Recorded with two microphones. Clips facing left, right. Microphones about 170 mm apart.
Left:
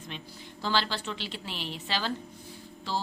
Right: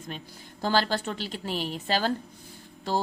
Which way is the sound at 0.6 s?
45° right (ahead or behind).